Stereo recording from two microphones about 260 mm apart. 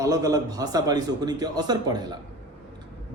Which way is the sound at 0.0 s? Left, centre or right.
Centre.